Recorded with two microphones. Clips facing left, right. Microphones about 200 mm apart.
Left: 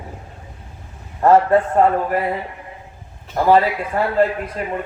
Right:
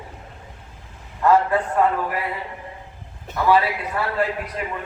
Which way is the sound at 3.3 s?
45° left (ahead or behind).